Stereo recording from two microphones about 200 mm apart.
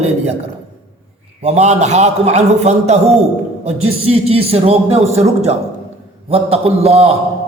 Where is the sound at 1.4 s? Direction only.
35° right (ahead or behind).